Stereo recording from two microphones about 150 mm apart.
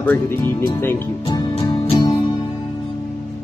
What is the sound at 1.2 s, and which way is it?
Music, 25° left (ahead or behind).